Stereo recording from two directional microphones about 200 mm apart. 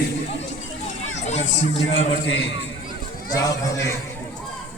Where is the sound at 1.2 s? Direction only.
35° left (ahead or behind).